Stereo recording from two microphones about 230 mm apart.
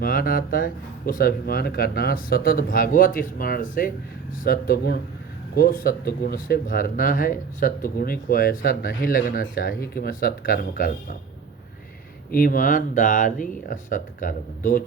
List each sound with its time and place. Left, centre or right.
0.0 s speech: left
12.3 s speech: left